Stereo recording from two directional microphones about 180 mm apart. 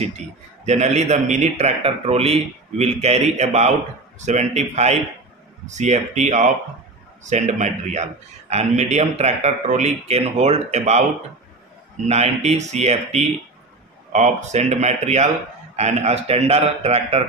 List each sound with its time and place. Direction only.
0.7 s a man's voice: 40° right (ahead or behind)
12.1 s a man's voice: 35° right (ahead or behind)